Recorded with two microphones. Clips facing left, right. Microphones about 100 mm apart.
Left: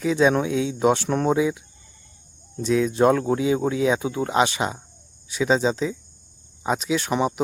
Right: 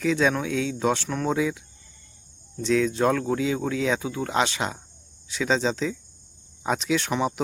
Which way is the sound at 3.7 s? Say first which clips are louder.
Left 4 dB; 15° left (ahead or behind).